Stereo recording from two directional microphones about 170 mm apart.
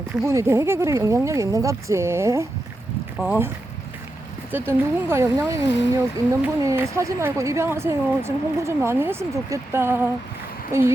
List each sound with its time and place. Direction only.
0.1 s speech: 15° right (ahead or behind)
4.5 s speech: 10° right (ahead or behind)
5.5 s speech: 90° left
6.4 s speech: 15° right (ahead or behind)